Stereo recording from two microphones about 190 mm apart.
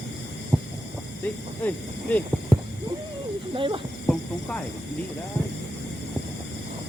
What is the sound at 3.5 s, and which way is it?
Speech, 25° right (ahead or behind).